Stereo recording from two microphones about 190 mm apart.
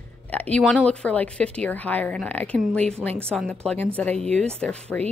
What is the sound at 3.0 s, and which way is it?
Speech, 5° right (ahead or behind).